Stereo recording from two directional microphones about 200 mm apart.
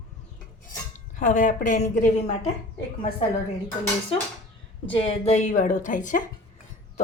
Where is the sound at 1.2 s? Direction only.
40° left (ahead or behind).